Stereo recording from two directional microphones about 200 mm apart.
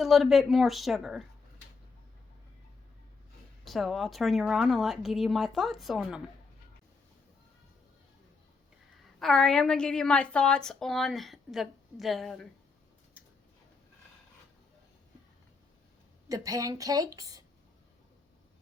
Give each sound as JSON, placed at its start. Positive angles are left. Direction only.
{"t": 0.0, "sound": "a woman's voice", "side_deg": 0}
{"t": 3.6, "sound": "a woman's voice", "side_deg": 0}
{"t": 9.1, "sound": "a woman's voice", "side_deg": 0}
{"t": 16.3, "sound": "a woman's voice", "side_deg": -15}